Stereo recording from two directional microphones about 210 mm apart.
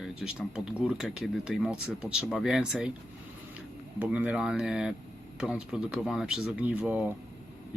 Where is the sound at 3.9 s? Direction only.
5° right (ahead or behind).